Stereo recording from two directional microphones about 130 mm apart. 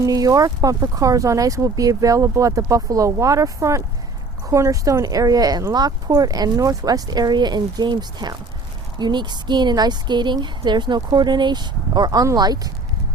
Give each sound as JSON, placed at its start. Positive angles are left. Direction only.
{"t": 0.0, "sound": "speech", "side_deg": -25}